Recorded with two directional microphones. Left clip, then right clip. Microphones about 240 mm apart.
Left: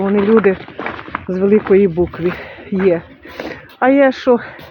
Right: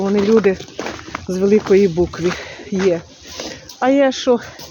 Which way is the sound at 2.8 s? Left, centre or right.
Centre.